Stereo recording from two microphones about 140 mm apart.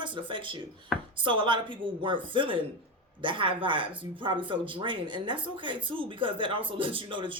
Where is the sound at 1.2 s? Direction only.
35° right (ahead or behind).